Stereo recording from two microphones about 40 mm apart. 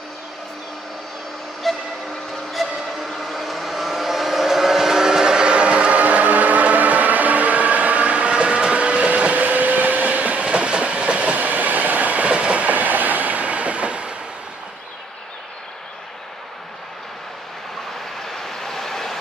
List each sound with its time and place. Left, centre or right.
1.6 s train: centre
2.5 s vehicle: centre; by 14.1 s right
18.2 s vehicle: centre